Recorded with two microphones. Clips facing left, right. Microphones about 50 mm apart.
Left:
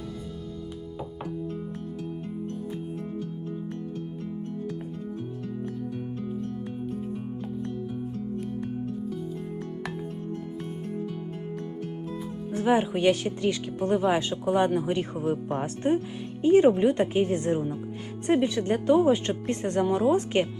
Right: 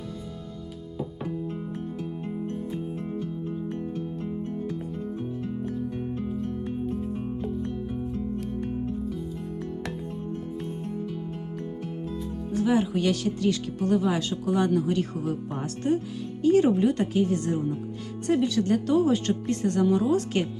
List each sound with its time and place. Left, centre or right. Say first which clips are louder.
12.5 s speech: left 1 dB; left